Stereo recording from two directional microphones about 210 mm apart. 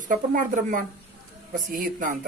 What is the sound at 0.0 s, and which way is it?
Speech, 40° right (ahead or behind).